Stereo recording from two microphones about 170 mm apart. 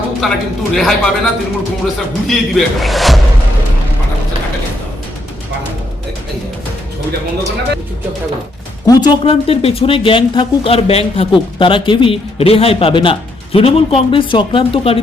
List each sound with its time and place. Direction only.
0.2 s a man's voice: centre (ahead or behind)
8.9 s speech: 25° left (ahead or behind)